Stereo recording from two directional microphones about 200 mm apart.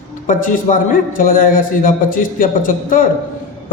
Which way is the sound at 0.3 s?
40° left (ahead or behind).